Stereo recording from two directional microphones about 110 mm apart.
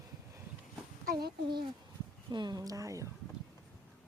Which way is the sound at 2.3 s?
40° right (ahead or behind).